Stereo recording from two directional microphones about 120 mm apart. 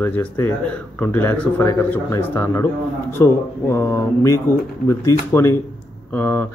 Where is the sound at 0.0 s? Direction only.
15° left (ahead or behind).